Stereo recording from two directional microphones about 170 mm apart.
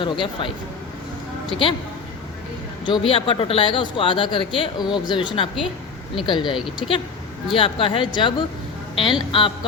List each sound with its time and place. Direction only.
0.0 s speech: 30° left (ahead or behind)
2.8 s a woman's voice: 30° left (ahead or behind)